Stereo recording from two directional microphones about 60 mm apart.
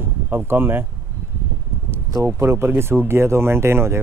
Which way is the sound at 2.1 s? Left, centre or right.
Right.